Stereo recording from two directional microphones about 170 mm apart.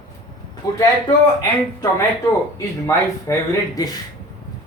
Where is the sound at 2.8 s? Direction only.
15° left (ahead or behind).